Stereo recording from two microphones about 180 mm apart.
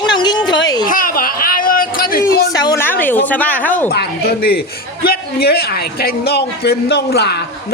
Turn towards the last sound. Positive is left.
turn(degrees=65)  # may be behind; listen again after turning